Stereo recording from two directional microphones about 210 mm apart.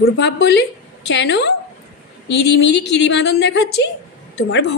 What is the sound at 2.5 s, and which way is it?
Speech, 55° left (ahead or behind).